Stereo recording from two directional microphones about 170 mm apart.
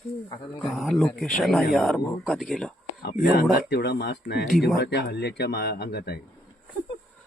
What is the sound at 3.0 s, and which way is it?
Speech, 70° left (ahead or behind).